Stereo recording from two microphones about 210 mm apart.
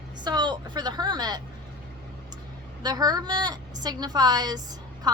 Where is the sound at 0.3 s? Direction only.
20° right (ahead or behind).